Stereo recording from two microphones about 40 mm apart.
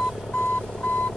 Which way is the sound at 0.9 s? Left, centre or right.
Left.